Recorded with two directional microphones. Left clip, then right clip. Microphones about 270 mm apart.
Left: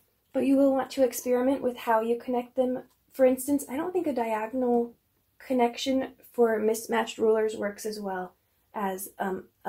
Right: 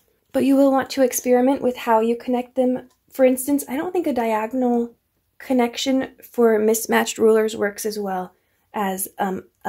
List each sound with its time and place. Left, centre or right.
0.3 s speech: right